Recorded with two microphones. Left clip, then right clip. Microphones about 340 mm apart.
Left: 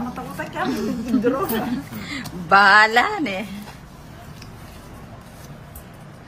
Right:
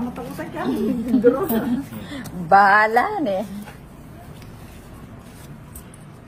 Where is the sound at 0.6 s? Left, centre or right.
Centre.